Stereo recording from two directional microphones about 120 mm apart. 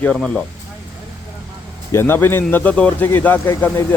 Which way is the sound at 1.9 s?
20° left (ahead or behind).